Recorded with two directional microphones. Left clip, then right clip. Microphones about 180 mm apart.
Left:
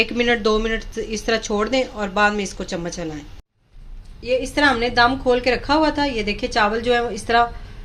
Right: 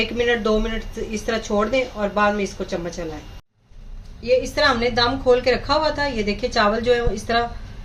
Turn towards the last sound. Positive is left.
turn(degrees=50)  # may be behind; listen again after turning